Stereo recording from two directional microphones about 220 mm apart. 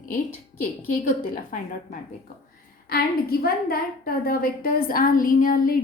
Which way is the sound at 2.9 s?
45° left (ahead or behind).